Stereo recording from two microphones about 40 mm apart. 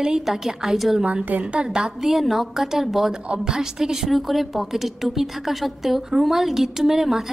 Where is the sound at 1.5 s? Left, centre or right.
Right.